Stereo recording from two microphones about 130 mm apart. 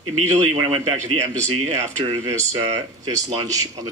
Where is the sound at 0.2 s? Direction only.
60° right (ahead or behind).